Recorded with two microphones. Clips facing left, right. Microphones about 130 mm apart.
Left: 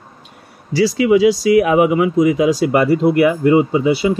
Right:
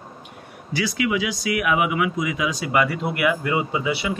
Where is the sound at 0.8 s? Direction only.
30° left (ahead or behind).